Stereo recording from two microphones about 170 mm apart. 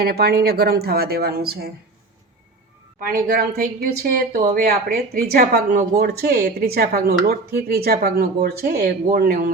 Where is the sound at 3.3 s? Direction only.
70° right (ahead or behind).